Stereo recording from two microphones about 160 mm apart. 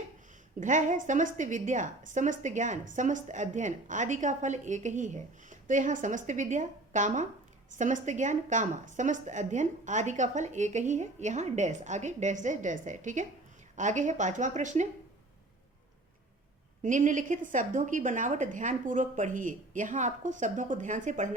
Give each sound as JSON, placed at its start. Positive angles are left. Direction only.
{"t": 0.6, "sound": "a woman's voice", "side_deg": -50}
{"t": 16.8, "sound": "a woman's voice", "side_deg": -55}